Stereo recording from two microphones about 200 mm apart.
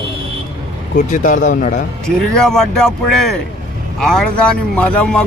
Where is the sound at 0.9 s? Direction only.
40° left (ahead or behind).